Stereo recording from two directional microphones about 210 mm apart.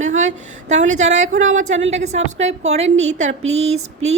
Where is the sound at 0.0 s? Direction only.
35° right (ahead or behind).